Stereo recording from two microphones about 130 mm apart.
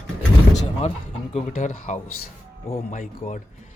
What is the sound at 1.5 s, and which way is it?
Speech, 85° left.